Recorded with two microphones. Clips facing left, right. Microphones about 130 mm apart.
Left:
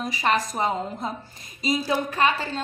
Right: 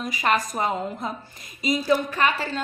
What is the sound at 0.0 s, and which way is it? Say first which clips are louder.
Speech: even; 35° left (ahead or behind).